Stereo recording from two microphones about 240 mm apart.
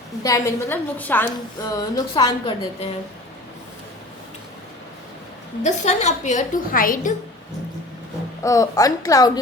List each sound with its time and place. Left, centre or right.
0.2 s a woman's voice: centre
5.6 s a woman's voice: left
8.4 s a woman's voice: centre